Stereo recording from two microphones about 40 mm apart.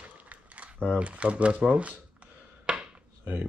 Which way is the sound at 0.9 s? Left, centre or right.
Right.